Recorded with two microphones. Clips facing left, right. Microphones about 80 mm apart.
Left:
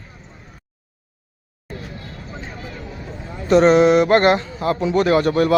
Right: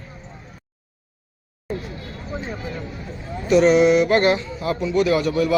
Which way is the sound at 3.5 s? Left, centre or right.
Left.